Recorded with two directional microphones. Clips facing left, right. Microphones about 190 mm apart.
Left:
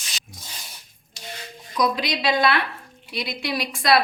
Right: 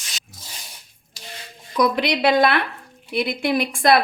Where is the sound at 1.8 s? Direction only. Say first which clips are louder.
Right 4 dB; 60° right (ahead or behind).